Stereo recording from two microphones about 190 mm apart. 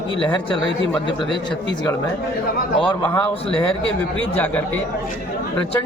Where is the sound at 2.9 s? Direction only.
10° left (ahead or behind).